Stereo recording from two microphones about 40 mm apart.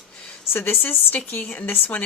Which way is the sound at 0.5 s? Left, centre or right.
Left.